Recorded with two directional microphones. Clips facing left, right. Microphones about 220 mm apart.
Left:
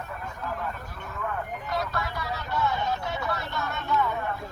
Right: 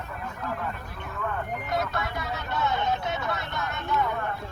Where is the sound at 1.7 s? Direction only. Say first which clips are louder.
Right 1 dB; 20° right (ahead or behind).